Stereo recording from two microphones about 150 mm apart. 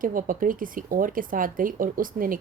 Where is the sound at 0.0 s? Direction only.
65° right (ahead or behind).